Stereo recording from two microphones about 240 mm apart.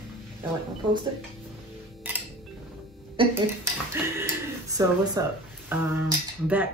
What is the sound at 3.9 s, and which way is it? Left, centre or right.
Speech, centre.